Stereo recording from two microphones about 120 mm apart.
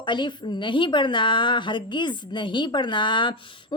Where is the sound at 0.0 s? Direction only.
40° left (ahead or behind).